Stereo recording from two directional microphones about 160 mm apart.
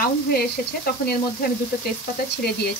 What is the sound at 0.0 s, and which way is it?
Sizzle, 70° left (ahead or behind).